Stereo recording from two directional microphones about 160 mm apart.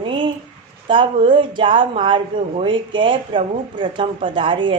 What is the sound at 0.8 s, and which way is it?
Speech, 30° right (ahead or behind).